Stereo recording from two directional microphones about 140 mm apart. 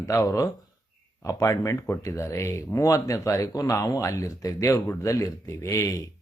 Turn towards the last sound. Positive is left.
turn(degrees=25)  # may be behind; listen again after turning